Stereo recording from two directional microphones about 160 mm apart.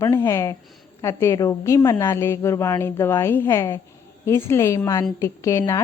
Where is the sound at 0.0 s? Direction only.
20° left (ahead or behind).